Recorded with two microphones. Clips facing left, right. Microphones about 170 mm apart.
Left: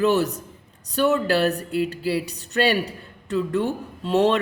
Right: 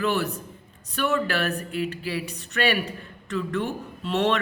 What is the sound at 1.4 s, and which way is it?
Speech, 35° left (ahead or behind).